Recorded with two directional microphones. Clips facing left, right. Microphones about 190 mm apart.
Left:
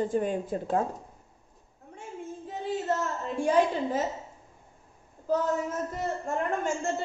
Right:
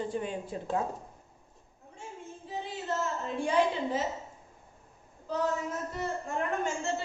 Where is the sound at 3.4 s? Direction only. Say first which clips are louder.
Left 4 dB; 45° left (ahead or behind).